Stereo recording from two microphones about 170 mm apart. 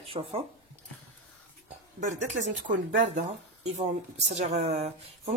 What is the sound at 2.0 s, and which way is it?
A woman's voice, 45° right (ahead or behind).